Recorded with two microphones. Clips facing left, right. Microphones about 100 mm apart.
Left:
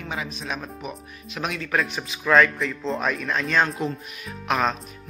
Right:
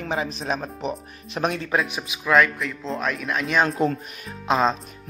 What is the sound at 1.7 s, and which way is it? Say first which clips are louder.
A man's voice: right 1 dB; 15° right (ahead or behind).